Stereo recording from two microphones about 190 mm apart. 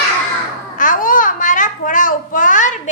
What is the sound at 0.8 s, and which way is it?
Babbling, 45° left (ahead or behind).